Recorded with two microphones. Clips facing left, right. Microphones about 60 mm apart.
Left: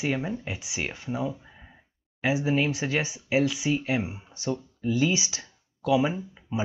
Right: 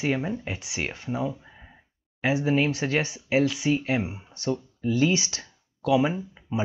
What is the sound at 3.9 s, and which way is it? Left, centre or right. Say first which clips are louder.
Speech: right 1 dB; centre.